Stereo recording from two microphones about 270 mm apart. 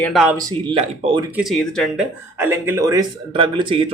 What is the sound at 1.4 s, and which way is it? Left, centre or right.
Speech, centre.